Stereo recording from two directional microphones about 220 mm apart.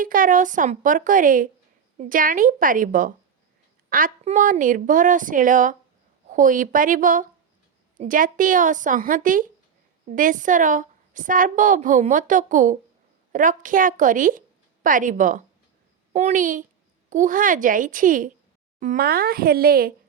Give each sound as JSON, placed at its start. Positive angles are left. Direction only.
{"t": 0.0, "sound": "a woman's voice", "side_deg": -40}